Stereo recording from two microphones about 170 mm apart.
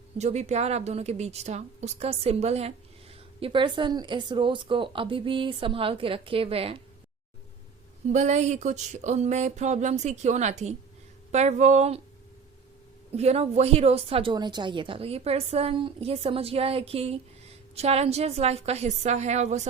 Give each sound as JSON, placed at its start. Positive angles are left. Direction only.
{"t": 0.2, "sound": "a woman's voice", "side_deg": -40}
{"t": 8.0, "sound": "a woman's voice", "side_deg": -45}
{"t": 13.1, "sound": "a woman's voice", "side_deg": -40}